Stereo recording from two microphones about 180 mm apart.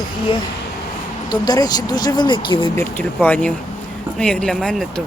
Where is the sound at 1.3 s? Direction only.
20° left (ahead or behind).